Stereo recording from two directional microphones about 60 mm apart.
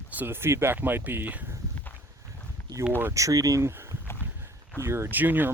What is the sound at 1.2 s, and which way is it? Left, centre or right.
Speech, right.